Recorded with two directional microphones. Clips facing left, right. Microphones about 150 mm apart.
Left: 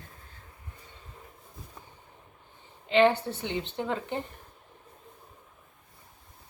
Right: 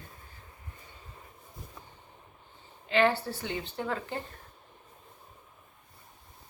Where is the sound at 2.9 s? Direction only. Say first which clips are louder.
Left 4 dB; 20° left (ahead or behind).